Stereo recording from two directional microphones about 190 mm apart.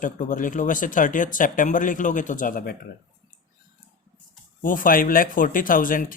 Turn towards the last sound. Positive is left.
turn(degrees=45)  # may be behind; listen again after turning